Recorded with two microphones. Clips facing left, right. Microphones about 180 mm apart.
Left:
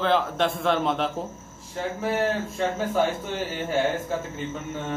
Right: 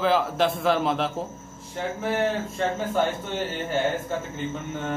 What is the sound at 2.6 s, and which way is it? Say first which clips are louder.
Speech: left 1 dB; 5° left (ahead or behind).